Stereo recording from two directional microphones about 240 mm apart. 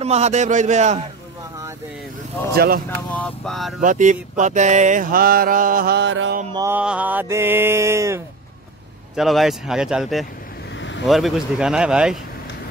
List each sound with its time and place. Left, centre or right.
0.0 s a man's voice: right
2.5 s mantra: right
3.1 s speech: centre
3.8 s mantra: right
6.5 s a sound: centre
9.1 s speech: centre